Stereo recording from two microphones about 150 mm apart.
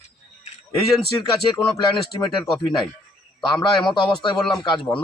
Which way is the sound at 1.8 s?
25° left (ahead or behind).